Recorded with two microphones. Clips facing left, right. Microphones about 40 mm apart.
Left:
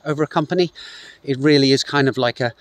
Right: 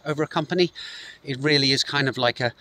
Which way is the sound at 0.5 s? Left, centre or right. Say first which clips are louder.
Left 3 dB; right.